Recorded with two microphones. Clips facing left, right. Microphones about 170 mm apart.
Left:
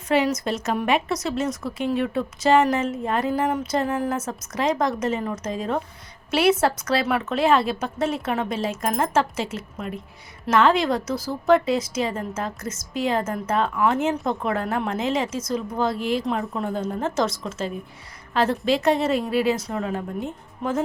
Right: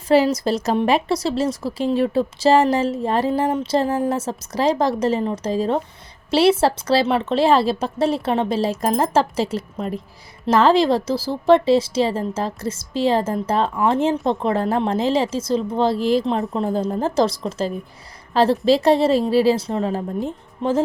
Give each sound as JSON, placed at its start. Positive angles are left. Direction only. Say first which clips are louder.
{"t": 0.1, "sound": "a woman's voice", "louder": "right 5 dB", "side_deg": -35}